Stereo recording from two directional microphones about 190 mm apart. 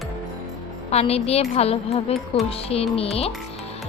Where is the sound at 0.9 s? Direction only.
30° left (ahead or behind).